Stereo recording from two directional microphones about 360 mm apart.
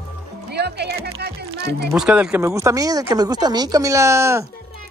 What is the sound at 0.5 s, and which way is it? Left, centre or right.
Music, right.